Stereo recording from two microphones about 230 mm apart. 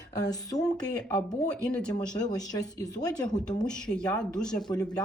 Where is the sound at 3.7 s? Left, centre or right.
Centre.